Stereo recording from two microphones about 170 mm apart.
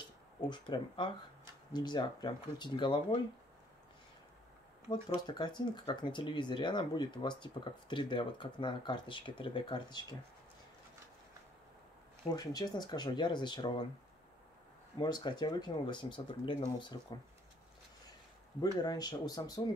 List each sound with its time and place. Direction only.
0.4 s speech: 25° left (ahead or behind)
4.8 s speech: 25° left (ahead or behind)
12.4 s speech: 25° left (ahead or behind)
15.0 s speech: 25° left (ahead or behind)
18.6 s speech: 25° left (ahead or behind)